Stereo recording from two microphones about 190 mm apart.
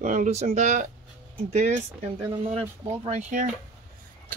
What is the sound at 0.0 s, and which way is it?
Speech, 40° right (ahead or behind).